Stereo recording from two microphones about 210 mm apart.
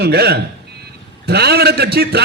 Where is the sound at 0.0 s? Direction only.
50° right (ahead or behind).